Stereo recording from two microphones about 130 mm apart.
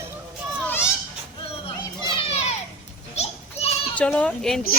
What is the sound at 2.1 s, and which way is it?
Children playing, 50° left (ahead or behind).